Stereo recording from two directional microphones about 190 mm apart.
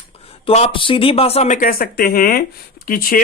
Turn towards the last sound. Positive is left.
turn(degrees=50)  # may be behind; listen again after turning